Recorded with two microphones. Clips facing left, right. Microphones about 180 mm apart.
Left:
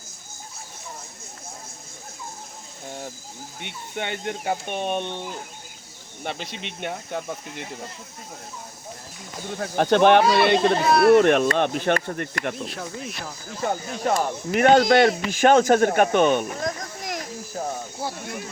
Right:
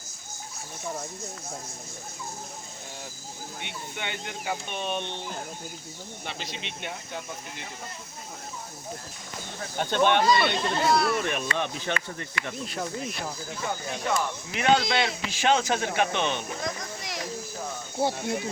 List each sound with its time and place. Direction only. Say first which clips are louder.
3.6 s speech: left 6 dB; 45° left (ahead or behind)
6.2 s speech: left 6 dB; 55° left (ahead or behind)
9.6 s speech: left 7 dB; 70° left (ahead or behind)
12.6 s speech: right 1 dB; centre (ahead or behind)
13.6 s speech: left 7 dB; 40° left (ahead or behind)
18.0 s speech: right 6 dB; 25° right (ahead or behind)